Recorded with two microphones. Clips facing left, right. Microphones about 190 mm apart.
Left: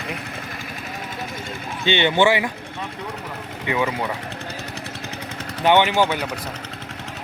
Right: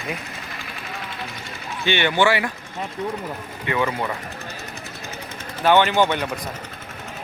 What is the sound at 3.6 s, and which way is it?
Speech, 15° left (ahead or behind).